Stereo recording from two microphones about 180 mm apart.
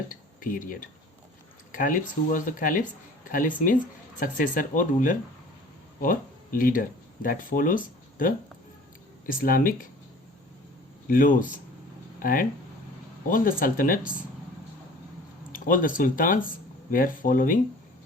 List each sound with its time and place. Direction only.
0.1 s speech: 50° left (ahead or behind)
11.1 s speech: 50° left (ahead or behind)
15.5 s speech: 50° left (ahead or behind)